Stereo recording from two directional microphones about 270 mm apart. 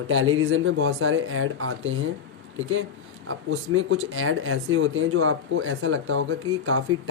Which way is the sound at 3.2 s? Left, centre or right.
Right.